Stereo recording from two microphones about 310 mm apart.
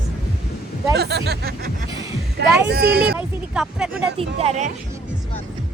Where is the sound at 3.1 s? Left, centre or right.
Centre.